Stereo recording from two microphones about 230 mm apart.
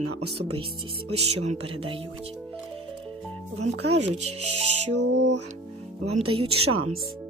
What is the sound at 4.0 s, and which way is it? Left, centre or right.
Speech, right.